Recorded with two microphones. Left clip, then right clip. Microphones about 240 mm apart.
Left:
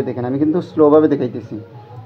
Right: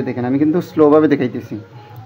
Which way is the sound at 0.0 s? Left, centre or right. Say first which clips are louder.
Right 1 dB; right.